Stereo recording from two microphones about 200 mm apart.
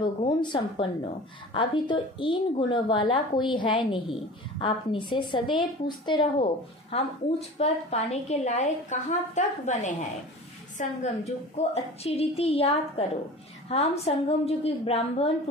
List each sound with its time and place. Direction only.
0.0 s a woman's voice: 25° left (ahead or behind)